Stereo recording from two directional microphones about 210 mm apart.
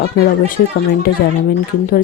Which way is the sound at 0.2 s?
40° left (ahead or behind).